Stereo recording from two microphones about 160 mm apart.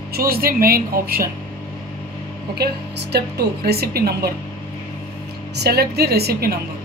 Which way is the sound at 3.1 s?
85° right.